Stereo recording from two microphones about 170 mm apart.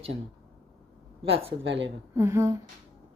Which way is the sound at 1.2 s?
35° right (ahead or behind).